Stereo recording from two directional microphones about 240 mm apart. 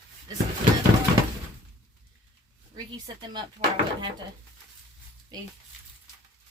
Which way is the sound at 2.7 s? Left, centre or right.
Centre.